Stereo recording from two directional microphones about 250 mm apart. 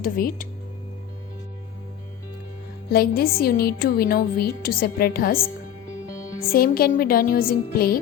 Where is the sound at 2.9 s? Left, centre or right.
Left.